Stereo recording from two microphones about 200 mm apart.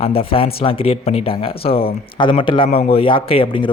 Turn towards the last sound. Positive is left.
turn(degrees=25)  # may be behind; listen again after turning